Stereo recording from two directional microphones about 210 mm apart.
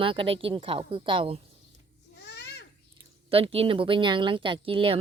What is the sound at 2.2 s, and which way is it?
Babbling, 50° left (ahead or behind).